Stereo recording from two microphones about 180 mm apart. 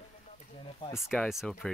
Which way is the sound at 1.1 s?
Centre (ahead or behind).